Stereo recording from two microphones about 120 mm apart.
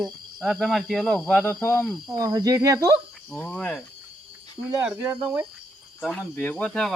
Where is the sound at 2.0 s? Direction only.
30° right (ahead or behind).